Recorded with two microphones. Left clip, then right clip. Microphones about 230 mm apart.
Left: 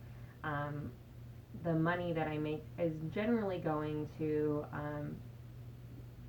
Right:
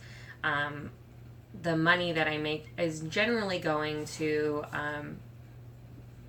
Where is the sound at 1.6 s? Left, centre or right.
Right.